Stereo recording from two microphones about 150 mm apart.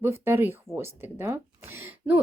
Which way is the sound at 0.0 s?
15° right (ahead or behind).